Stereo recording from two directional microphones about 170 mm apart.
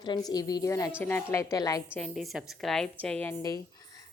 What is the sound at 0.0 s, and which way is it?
A woman's voice, 25° left (ahead or behind).